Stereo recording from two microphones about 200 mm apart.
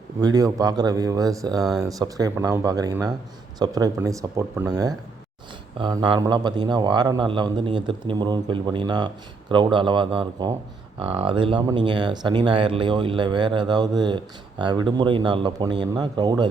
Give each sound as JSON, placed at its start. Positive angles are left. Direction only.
{"t": 0.2, "sound": "speech", "side_deg": -20}